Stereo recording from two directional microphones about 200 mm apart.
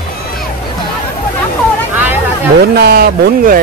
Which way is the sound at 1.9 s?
10° right (ahead or behind).